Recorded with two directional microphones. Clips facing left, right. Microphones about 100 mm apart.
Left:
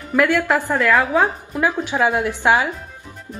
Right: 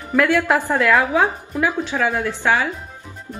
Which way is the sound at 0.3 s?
15° right (ahead or behind).